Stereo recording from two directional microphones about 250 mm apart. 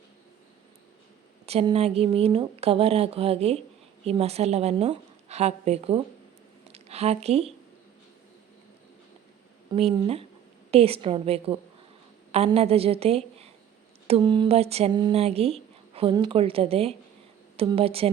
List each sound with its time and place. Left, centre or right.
1.5 s speech: right
9.7 s a woman's voice: right